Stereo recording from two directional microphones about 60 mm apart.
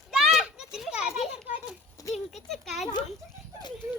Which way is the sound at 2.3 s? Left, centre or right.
Centre.